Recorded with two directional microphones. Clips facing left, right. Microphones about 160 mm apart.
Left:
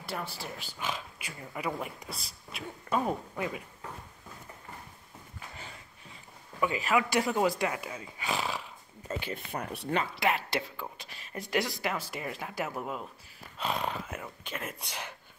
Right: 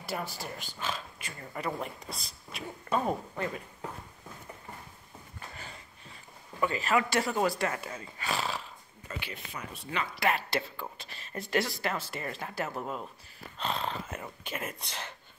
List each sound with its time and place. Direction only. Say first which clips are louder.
0.0 s speech: right 1 dB; centre (ahead or behind)
0.7 s speech: left 1 dB; 15° left (ahead or behind)
6.6 s speech: even; 10° left (ahead or behind)
9.2 s speech: left 5 dB; 50° left (ahead or behind)
10.1 s speech: even; 20° left (ahead or behind)
14.2 s speech: right 1 dB; 5° right (ahead or behind)
14.8 s speech: even; 10° left (ahead or behind)